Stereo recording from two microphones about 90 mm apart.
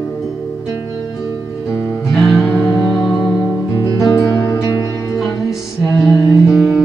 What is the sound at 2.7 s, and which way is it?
Music, 10° left (ahead or behind).